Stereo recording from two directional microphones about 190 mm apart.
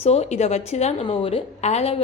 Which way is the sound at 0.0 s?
35° left (ahead or behind).